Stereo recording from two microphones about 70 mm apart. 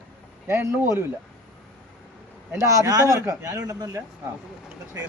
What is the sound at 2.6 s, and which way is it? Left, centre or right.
A man's voice, right.